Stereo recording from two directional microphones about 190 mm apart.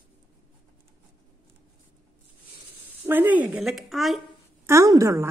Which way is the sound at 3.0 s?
10° right (ahead or behind).